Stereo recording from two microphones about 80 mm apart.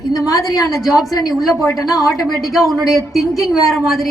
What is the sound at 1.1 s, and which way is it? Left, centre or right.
Speech, left.